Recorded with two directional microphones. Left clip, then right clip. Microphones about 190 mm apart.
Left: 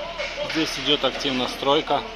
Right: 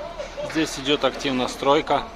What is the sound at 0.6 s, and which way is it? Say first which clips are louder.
Speech: even; 25° right (ahead or behind).